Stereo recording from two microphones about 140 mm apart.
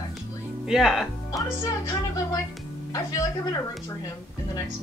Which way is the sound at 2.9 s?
25° left (ahead or behind).